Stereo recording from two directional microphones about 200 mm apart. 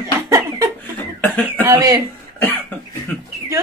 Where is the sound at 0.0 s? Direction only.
15° right (ahead or behind).